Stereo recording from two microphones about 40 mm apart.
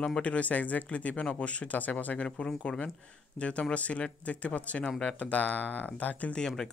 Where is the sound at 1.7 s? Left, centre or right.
Left.